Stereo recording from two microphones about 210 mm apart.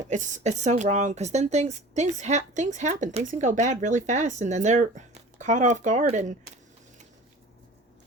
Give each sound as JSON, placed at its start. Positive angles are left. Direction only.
{"t": 0.1, "sound": "speech", "side_deg": -35}